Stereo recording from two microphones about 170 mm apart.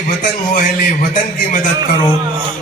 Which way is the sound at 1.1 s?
50° left (ahead or behind).